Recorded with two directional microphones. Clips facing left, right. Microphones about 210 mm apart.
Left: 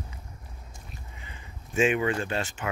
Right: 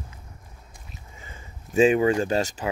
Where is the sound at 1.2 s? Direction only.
40° right (ahead or behind).